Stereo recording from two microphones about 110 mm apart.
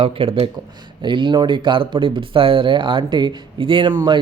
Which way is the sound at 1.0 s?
45° right (ahead or behind).